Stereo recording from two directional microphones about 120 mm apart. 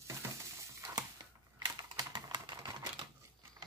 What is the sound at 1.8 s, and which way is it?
Typing, 35° right (ahead or behind).